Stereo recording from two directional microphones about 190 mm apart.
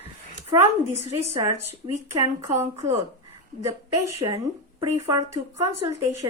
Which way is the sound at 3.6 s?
15° right (ahead or behind).